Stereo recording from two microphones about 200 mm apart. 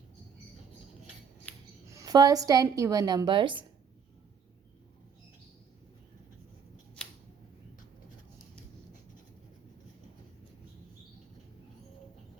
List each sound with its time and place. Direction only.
1.9 s a woman's voice: 15° right (ahead or behind)